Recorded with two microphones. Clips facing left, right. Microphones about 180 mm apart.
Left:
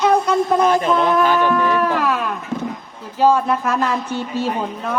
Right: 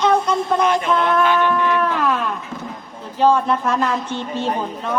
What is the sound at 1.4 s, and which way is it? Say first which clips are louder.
Livestock: left 1 dB; 5° left (ahead or behind).